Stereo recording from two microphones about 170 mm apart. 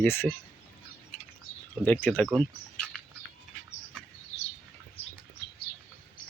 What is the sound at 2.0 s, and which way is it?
Speech, 5° left (ahead or behind).